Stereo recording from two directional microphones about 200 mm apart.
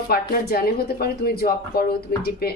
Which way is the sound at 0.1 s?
50° left (ahead or behind).